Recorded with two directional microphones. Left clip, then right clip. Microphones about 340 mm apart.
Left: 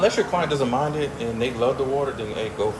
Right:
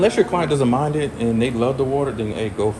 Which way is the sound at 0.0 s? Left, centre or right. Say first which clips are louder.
Right 3 dB; right.